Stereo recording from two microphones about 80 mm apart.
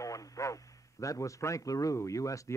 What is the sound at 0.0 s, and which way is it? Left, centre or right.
A man's voice, left.